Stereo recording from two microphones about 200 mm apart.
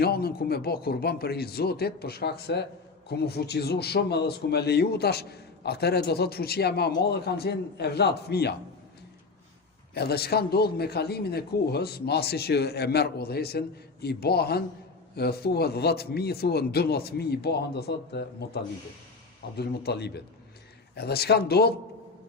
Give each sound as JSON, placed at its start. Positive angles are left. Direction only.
{"t": 0.0, "sound": "a man's voice", "side_deg": 50}
{"t": 9.9, "sound": "a man's voice", "side_deg": 55}